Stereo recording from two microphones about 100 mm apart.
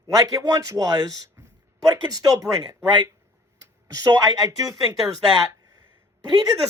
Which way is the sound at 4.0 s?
40° right (ahead or behind).